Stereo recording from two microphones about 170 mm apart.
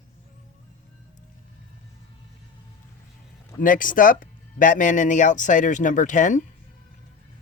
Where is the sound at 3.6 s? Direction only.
50° left (ahead or behind).